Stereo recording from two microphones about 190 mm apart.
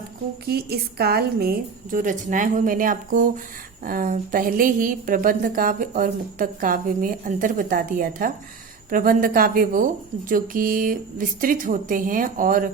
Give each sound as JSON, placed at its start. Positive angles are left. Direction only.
{"t": 0.4, "sound": "a woman's voice", "side_deg": -55}